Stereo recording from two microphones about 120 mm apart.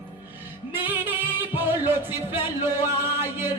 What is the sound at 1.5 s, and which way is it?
Music, 15° right (ahead or behind).